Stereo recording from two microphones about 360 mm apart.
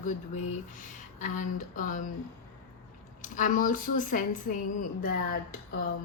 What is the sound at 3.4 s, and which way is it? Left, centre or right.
Speech, left.